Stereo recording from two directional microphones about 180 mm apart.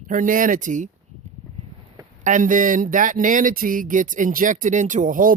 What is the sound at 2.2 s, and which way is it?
Speech, 45° right (ahead or behind).